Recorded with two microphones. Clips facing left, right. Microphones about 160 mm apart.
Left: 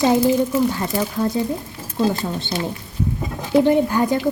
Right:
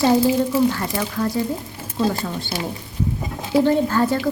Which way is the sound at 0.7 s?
20° left (ahead or behind).